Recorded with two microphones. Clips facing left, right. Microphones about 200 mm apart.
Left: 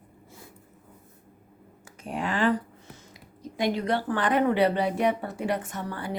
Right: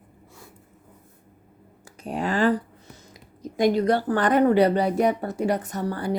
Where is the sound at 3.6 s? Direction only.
40° right (ahead or behind).